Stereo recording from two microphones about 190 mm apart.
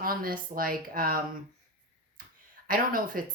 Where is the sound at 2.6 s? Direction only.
45° right (ahead or behind).